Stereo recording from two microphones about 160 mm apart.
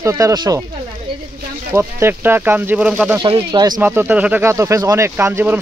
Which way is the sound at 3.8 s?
10° right (ahead or behind).